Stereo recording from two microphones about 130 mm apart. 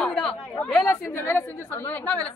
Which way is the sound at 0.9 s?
20° left (ahead or behind).